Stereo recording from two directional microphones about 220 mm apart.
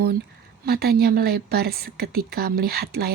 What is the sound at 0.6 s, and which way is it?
A woman's voice, 45° right (ahead or behind).